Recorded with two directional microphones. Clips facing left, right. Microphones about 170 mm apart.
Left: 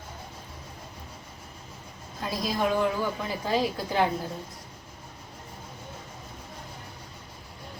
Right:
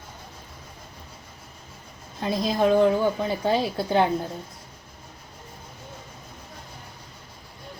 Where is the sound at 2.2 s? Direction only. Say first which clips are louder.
Right 6 dB; 25° right (ahead or behind).